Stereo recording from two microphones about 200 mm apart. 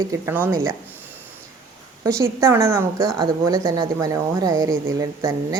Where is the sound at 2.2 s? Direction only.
15° right (ahead or behind).